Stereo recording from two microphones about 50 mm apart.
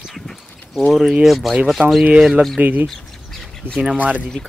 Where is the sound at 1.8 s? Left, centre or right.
Right.